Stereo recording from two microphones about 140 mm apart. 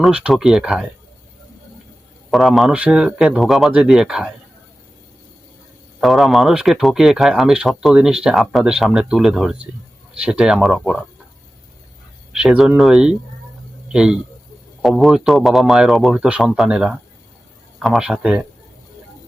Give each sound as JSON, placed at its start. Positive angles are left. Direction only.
{"t": 0.0, "sound": "speech", "side_deg": -5}
{"t": 2.3, "sound": "speech", "side_deg": 0}
{"t": 6.0, "sound": "speech", "side_deg": 0}
{"t": 12.3, "sound": "speech", "side_deg": -5}